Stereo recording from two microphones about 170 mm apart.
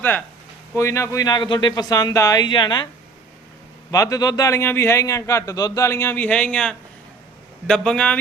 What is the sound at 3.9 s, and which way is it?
A man's voice, 20° left (ahead or behind).